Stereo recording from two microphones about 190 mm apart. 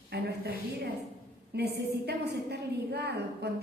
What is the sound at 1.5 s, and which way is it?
A woman's voice, 60° right (ahead or behind).